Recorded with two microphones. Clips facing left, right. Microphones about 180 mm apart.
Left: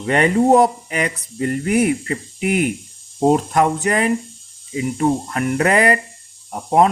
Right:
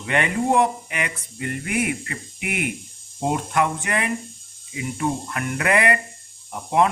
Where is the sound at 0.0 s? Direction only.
35° left (ahead or behind).